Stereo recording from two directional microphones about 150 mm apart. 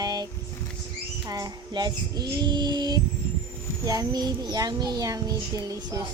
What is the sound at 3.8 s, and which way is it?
Speech, 25° right (ahead or behind).